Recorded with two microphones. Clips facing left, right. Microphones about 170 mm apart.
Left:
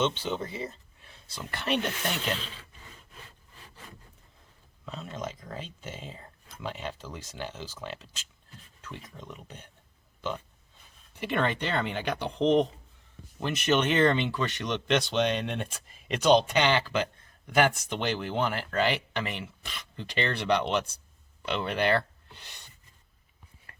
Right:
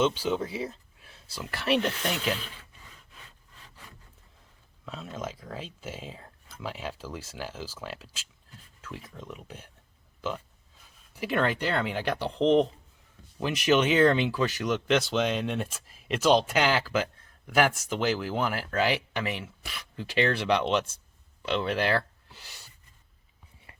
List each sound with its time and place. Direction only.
0.0 s speech: 5° right (ahead or behind)
4.9 s speech: centre (ahead or behind)
23.7 s whispering: 25° right (ahead or behind)